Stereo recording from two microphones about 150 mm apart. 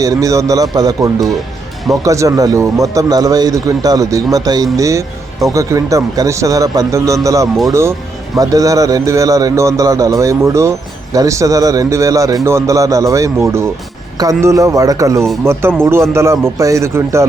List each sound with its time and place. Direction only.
0.0 s speech: 25° right (ahead or behind)